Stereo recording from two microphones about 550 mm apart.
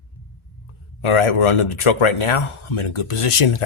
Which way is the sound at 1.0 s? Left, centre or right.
Left.